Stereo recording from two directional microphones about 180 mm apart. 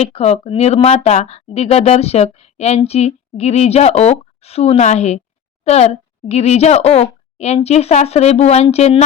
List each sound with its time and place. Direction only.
0.0 s speech: 35° left (ahead or behind)